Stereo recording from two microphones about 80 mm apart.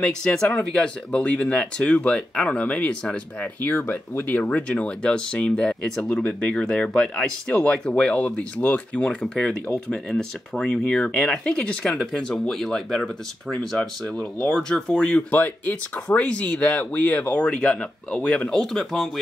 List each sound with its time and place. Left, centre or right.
0.0 s speech: centre